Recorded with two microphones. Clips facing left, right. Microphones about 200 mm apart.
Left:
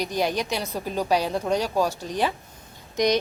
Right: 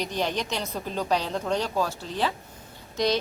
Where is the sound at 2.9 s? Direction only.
15° left (ahead or behind).